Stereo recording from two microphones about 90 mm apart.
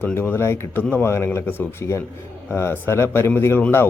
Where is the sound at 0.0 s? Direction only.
25° left (ahead or behind).